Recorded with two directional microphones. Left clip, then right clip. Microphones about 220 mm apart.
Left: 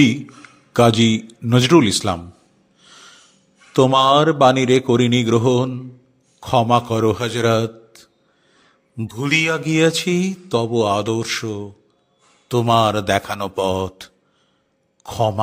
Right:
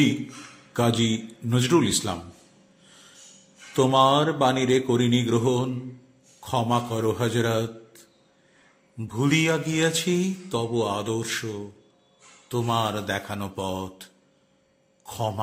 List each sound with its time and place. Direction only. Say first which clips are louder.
0.7 s mantra: left 10 dB; 50° left (ahead or behind)
2.8 s music: left 9 dB; 50° left (ahead or behind)
3.7 s mantra: left 6 dB; 50° left (ahead or behind)
9.2 s mantra: left 5 dB; 50° left (ahead or behind)